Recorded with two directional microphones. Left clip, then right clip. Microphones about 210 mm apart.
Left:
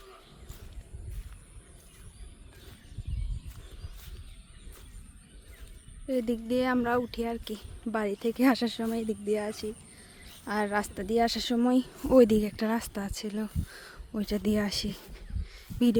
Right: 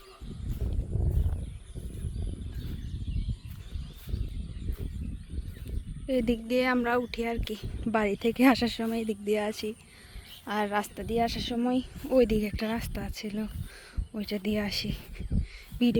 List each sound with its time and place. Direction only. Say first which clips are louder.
6.1 s speech: right 2 dB; 5° right (ahead or behind)
10.4 s speech: even; 10° left (ahead or behind)